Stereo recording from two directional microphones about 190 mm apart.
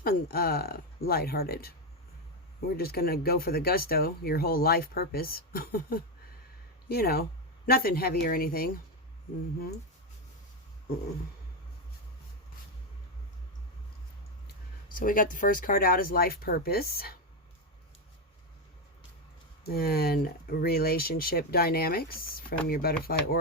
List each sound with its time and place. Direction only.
0.0 s speech: 50° left (ahead or behind)
2.7 s speech: 55° left (ahead or behind)
14.9 s speech: 45° left (ahead or behind)
19.6 s speech: 55° left (ahead or behind)